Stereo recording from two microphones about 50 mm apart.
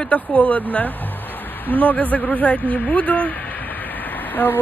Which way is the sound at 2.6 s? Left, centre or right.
Left.